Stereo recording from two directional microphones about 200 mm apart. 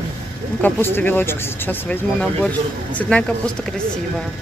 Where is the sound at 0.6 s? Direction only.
10° left (ahead or behind).